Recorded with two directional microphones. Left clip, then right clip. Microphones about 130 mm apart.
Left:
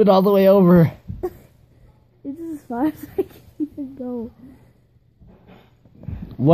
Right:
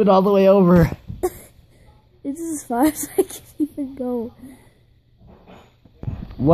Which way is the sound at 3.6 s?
45° right (ahead or behind).